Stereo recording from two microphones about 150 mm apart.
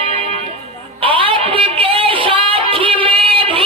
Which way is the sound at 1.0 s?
35° right (ahead or behind).